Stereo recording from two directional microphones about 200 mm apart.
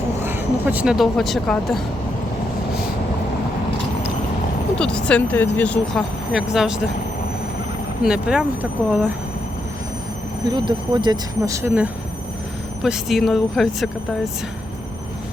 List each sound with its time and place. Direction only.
0.2 s speech: 10° right (ahead or behind)
4.8 s speech: 5° left (ahead or behind)
8.0 s speech: 5° right (ahead or behind)
10.5 s speech: 20° right (ahead or behind); by 13.9 s centre (ahead or behind)